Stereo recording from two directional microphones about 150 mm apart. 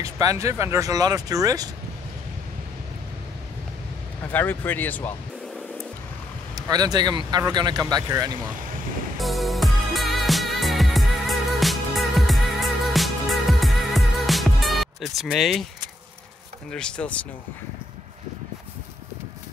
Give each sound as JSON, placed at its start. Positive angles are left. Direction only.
{"t": 0.0, "sound": "speech", "side_deg": -20}
{"t": 4.3, "sound": "speech", "side_deg": 15}
{"t": 6.5, "sound": "speech", "side_deg": -25}
{"t": 9.2, "sound": "music", "side_deg": 0}
{"t": 16.7, "sound": "speech", "side_deg": 5}